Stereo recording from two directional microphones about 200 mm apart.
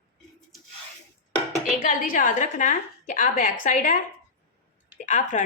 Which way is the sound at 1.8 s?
40° left (ahead or behind).